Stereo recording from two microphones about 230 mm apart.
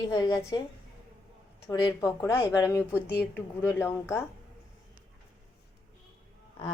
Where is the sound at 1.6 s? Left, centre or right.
Centre.